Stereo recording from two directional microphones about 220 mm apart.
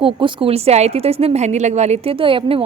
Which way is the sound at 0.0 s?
25° right (ahead or behind).